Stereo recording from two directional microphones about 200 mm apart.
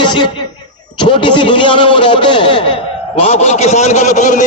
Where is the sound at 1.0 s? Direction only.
25° left (ahead or behind).